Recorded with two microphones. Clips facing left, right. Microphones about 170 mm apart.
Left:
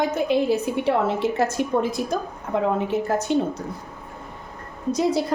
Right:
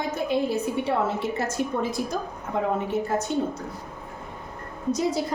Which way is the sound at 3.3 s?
90° left.